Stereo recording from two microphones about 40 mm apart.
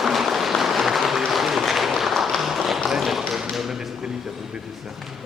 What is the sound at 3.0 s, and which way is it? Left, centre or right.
Tap, centre.